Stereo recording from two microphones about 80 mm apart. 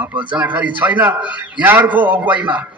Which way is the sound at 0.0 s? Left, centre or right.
Centre.